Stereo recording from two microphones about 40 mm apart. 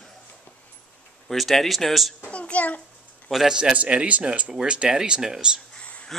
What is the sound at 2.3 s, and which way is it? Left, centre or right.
Speech, left.